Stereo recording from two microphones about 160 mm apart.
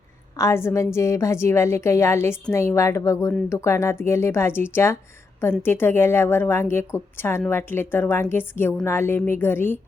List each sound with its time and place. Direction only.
0.3 s a woman's voice: 15° left (ahead or behind)